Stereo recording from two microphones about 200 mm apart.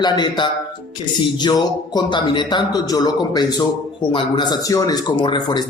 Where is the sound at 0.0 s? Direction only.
20° left (ahead or behind).